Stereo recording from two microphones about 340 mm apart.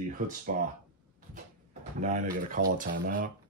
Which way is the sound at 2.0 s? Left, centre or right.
Right.